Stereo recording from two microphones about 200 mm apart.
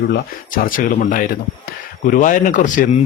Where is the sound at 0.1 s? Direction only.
45° left (ahead or behind).